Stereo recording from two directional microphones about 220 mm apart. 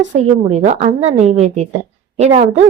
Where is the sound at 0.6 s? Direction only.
30° right (ahead or behind).